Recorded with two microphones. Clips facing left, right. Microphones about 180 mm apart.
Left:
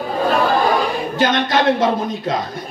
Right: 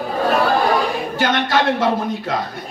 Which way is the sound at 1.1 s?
20° left (ahead or behind).